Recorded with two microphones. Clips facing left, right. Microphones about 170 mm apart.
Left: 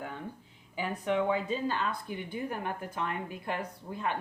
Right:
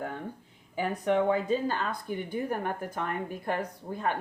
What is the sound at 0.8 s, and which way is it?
Speech, 45° right (ahead or behind).